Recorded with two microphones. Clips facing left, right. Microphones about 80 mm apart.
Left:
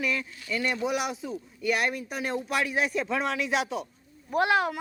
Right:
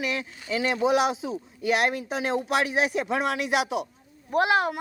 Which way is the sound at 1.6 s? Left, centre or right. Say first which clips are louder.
Right 3 dB; right.